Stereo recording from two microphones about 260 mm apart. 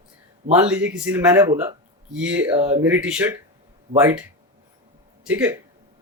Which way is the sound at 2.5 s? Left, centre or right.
Right.